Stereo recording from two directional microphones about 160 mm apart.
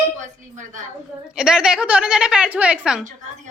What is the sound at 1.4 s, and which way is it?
A woman's voice, 5° right (ahead or behind).